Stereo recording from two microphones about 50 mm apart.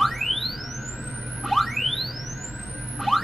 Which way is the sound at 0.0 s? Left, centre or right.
Centre.